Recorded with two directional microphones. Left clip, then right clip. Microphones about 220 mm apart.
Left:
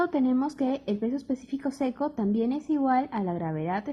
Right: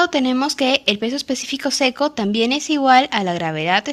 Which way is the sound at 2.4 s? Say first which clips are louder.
Right 12 dB; 15° right (ahead or behind).